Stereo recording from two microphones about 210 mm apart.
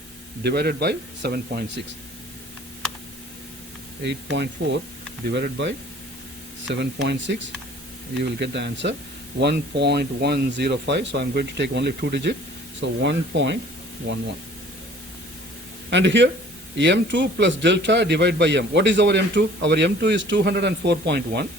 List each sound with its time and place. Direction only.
0.4 s speech: 50° right (ahead or behind)
4.0 s a man's voice: 55° right (ahead or behind)
15.9 s a man's voice: 60° right (ahead or behind)